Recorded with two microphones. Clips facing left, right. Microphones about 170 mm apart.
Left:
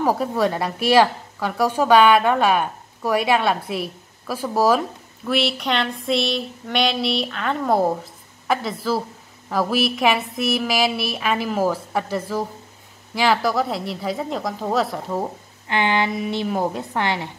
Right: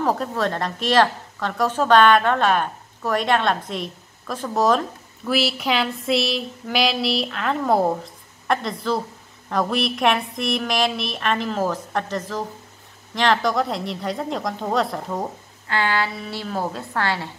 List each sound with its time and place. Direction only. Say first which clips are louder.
0.0 s a woman's voice: left 2 dB; 10° left (ahead or behind)
15.7 s a woman's voice: left 2 dB; 20° left (ahead or behind)